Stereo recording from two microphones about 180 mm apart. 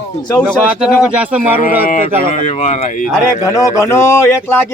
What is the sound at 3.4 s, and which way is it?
A man's voice, 15° left (ahead or behind).